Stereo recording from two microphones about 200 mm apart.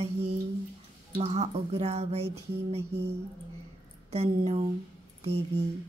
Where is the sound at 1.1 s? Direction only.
30° right (ahead or behind).